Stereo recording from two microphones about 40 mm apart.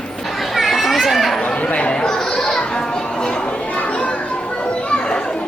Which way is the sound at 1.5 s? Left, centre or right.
Left.